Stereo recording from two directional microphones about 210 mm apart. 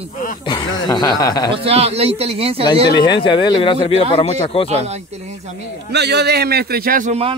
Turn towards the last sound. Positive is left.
turn(degrees=-30)  # may be behind; listen again after turning